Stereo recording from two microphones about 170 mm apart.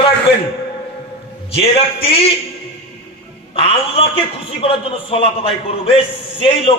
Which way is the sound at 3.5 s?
35° left (ahead or behind).